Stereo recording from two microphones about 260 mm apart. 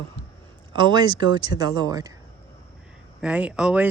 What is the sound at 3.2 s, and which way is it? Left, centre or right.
Speech, centre.